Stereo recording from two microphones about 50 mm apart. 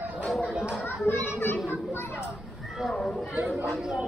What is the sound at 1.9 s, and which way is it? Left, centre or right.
Children playing, left.